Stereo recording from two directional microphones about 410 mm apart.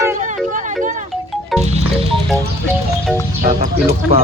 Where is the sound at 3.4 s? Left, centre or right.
Centre.